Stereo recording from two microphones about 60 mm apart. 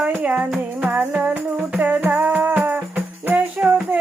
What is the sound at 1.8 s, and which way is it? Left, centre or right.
Music, right.